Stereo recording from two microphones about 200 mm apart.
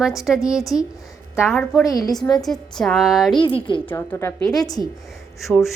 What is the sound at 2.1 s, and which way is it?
A woman's voice, centre (ahead or behind).